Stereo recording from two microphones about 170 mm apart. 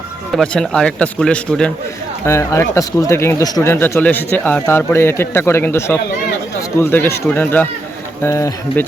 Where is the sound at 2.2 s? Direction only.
15° left (ahead or behind).